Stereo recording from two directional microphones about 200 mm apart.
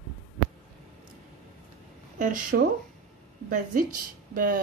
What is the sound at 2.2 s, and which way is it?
A woman's voice, 40° right (ahead or behind).